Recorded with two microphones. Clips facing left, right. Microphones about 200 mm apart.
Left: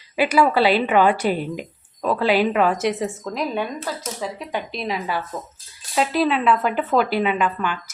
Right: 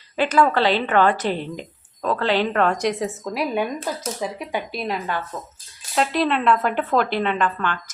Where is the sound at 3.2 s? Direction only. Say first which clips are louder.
Right 3 dB; 10° right (ahead or behind).